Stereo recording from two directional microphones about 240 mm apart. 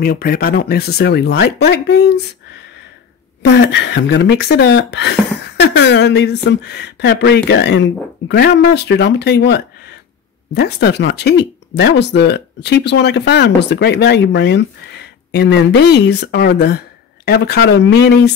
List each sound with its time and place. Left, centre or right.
0.0 s speech: left
3.4 s speech: left